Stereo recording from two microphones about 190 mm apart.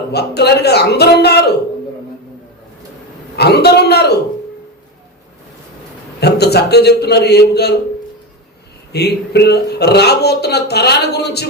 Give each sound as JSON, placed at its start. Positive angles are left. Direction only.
{"t": 0.1, "sound": "speech", "side_deg": 60}
{"t": 3.3, "sound": "speech", "side_deg": 60}
{"t": 6.1, "sound": "speech", "side_deg": 60}
{"t": 8.9, "sound": "speech", "side_deg": 60}